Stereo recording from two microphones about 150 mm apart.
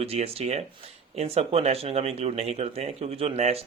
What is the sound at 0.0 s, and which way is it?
Speech, 40° right (ahead or behind).